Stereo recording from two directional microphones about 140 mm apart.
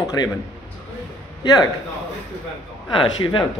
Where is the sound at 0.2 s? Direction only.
30° left (ahead or behind).